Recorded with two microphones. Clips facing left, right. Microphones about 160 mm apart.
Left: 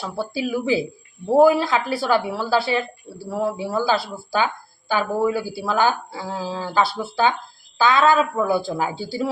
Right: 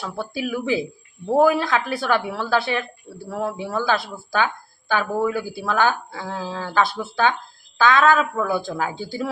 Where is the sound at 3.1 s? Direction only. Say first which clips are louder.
Left 1 dB; 30° left (ahead or behind).